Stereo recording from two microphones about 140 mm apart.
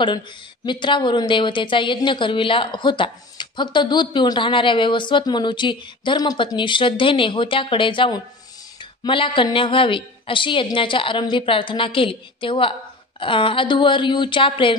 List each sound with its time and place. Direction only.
0.7 s a woman's voice: 35° left (ahead or behind)